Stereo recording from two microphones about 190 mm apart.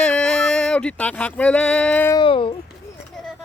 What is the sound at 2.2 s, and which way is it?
Speech, 30° left (ahead or behind).